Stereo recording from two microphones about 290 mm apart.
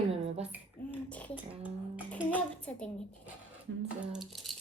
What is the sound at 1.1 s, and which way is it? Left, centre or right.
Hands, centre.